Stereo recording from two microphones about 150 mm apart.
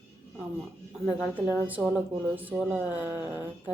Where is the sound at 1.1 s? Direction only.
10° right (ahead or behind).